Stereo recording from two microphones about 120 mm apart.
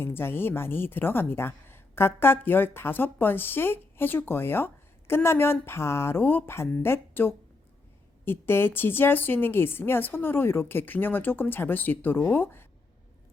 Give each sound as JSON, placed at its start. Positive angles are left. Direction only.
{"t": 0.0, "sound": "a woman's voice", "side_deg": 20}